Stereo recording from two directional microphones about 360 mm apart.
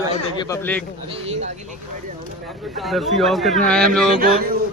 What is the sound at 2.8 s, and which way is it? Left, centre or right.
Speech, centre.